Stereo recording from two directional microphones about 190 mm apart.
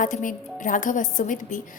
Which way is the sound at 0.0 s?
45° left (ahead or behind).